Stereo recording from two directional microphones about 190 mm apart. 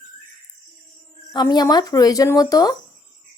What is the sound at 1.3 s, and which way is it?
Speech, 20° left (ahead or behind).